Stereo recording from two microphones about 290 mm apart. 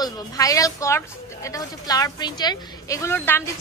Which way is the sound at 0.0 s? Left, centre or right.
Centre.